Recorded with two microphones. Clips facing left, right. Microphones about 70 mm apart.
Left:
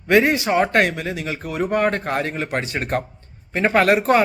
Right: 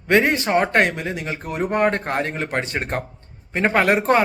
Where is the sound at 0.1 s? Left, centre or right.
Right.